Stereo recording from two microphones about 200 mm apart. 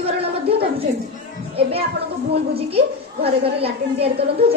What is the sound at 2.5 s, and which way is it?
A woman's voice, 30° right (ahead or behind).